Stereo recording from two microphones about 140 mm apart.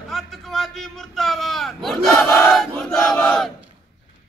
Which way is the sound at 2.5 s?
5° left (ahead or behind).